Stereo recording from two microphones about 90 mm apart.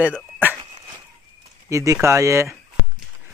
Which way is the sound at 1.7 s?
35° right (ahead or behind).